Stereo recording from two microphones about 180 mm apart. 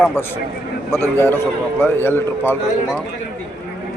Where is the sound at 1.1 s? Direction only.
10° left (ahead or behind).